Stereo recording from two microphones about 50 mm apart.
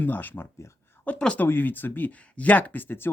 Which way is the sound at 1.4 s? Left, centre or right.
Left.